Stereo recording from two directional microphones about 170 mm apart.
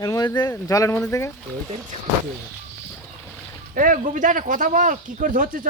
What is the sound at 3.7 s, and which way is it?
Speech, 50° right (ahead or behind).